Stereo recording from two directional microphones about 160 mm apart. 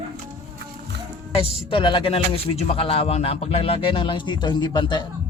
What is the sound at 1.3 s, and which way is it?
Speech, 30° left (ahead or behind).